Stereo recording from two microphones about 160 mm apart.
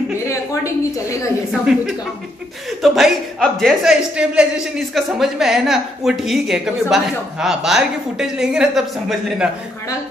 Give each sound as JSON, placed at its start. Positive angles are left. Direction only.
{"t": 2.8, "sound": "a man's voice", "side_deg": 0}